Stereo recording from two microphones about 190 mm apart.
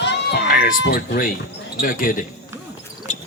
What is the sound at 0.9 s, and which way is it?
Speech, 50° left (ahead or behind).